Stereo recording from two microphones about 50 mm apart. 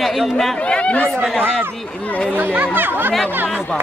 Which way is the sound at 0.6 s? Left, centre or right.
Left.